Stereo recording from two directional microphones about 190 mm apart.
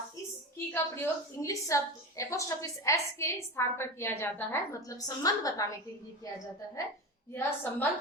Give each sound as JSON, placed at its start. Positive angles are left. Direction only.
{"t": 0.7, "sound": "a woman's voice", "side_deg": 15}
{"t": 7.3, "sound": "a woman's voice", "side_deg": 10}